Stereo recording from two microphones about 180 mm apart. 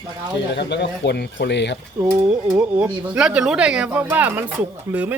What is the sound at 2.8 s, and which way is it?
Speech, 5° right (ahead or behind).